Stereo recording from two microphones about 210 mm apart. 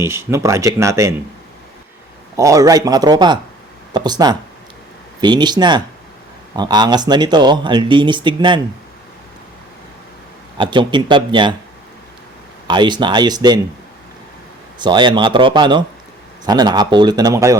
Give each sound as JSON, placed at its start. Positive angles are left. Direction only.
{"t": 0.0, "sound": "speech", "side_deg": -10}
{"t": 2.3, "sound": "speech", "side_deg": -15}
{"t": 10.6, "sound": "speech", "side_deg": -20}
{"t": 12.6, "sound": "speech", "side_deg": -20}
{"t": 14.8, "sound": "speech", "side_deg": -20}